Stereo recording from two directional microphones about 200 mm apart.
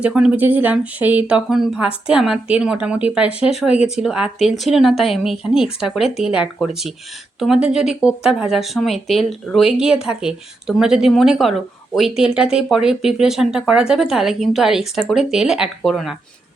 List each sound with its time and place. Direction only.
0.0 s speech: 5° right (ahead or behind)